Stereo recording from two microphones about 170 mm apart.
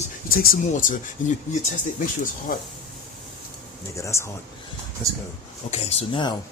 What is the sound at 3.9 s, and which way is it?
Speech, 15° left (ahead or behind).